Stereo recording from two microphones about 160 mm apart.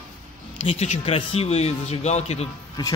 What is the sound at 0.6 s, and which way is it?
A man's voice, 40° left (ahead or behind).